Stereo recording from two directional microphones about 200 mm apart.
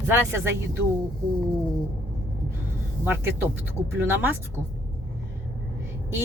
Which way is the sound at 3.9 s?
10° right (ahead or behind).